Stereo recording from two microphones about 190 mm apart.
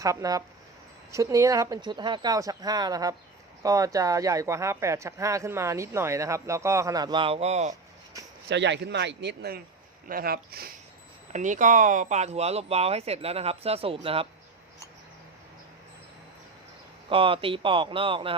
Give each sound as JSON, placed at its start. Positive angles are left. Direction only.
{"t": 0.0, "sound": "speech", "side_deg": -15}
{"t": 8.4, "sound": "speech", "side_deg": -70}
{"t": 11.3, "sound": "speech", "side_deg": -40}
{"t": 17.1, "sound": "speech", "side_deg": -30}